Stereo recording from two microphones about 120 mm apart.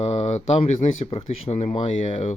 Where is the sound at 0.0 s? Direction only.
65° left (ahead or behind).